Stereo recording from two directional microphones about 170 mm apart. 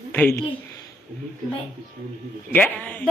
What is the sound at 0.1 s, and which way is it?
Speech, 10° left (ahead or behind).